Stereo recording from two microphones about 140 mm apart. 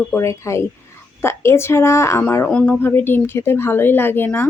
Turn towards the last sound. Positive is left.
turn(degrees=15)  # may be behind; listen again after turning